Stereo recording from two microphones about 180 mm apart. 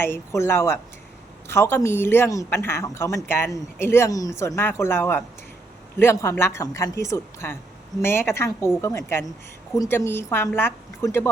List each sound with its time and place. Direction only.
0.0 s speech: 15° left (ahead or behind)